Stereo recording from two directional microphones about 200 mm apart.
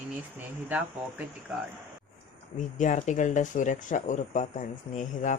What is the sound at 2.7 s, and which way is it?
Speech, 40° left (ahead or behind).